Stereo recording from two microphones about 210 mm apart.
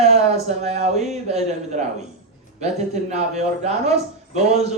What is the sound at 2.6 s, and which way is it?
Speech, 30° right (ahead or behind).